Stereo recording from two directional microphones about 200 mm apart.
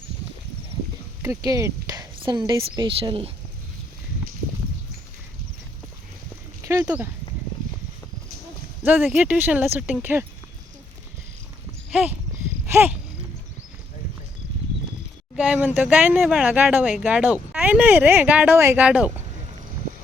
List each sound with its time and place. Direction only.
1.2 s speech: 15° right (ahead or behind)
6.7 s speech: 10° right (ahead or behind)
8.8 s speech: 5° right (ahead or behind)
11.9 s a sound: 5° right (ahead or behind)
15.4 s speech: 5° right (ahead or behind)